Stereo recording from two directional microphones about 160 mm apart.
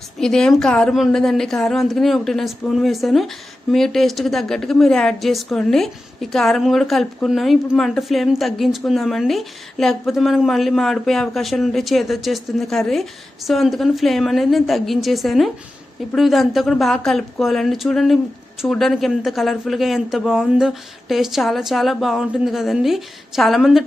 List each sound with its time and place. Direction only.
0.2 s a woman's voice: 5° left (ahead or behind)